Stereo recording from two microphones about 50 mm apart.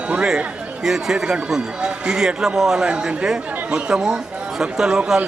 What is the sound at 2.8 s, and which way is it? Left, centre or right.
Speech, right.